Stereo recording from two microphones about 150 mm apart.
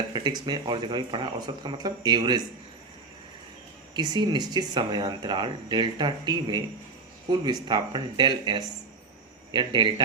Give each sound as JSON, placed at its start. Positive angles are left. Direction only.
{"t": 0.1, "sound": "speech", "side_deg": -30}
{"t": 3.9, "sound": "speech", "side_deg": -30}